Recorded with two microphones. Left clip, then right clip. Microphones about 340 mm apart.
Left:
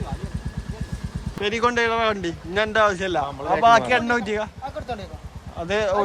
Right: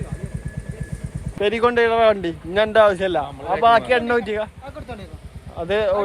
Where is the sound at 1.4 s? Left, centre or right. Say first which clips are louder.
Right 4 dB; centre.